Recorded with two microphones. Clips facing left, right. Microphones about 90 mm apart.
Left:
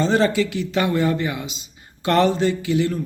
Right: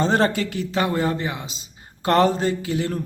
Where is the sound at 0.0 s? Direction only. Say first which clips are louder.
Left 2 dB; 45° right (ahead or behind).